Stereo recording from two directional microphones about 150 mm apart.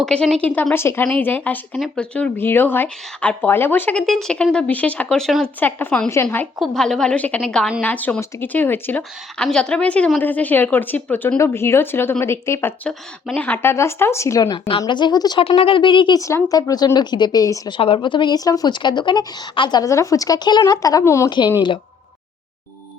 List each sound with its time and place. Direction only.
0.0 s a woman's voice: 5° left (ahead or behind)
12.9 s a woman's voice: 5° left (ahead or behind); by 21.3 s 20° left (ahead or behind)